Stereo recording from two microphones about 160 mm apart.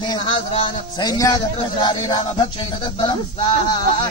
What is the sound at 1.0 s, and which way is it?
A man's voice, 25° left (ahead or behind).